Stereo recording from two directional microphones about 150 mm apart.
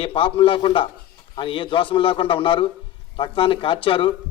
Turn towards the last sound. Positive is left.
turn(degrees=35)  # may be behind; listen again after turning